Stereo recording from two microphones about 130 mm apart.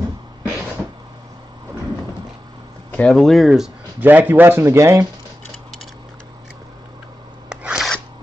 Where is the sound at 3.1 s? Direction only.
Centre (ahead or behind).